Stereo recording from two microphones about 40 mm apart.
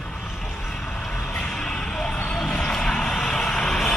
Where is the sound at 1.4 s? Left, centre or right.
Left.